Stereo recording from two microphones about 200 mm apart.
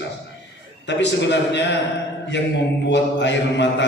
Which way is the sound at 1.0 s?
60° left (ahead or behind).